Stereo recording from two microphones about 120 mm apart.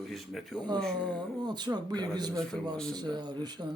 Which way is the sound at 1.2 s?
35° right (ahead or behind).